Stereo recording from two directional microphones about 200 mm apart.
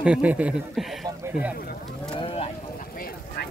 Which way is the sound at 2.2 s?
30° left (ahead or behind).